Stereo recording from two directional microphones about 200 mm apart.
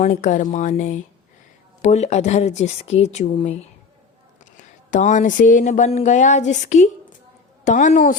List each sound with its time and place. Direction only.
0.0 s speech: 40° left (ahead or behind)